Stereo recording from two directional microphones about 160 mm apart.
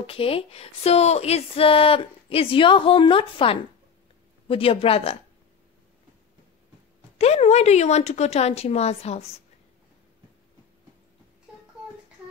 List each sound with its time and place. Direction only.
0.0 s speech: 35° left (ahead or behind)
7.2 s speech: 40° left (ahead or behind)